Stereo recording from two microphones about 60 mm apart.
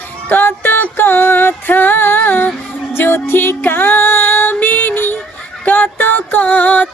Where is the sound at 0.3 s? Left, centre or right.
Left.